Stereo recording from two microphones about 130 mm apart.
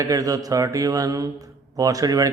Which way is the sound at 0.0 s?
25° right (ahead or behind).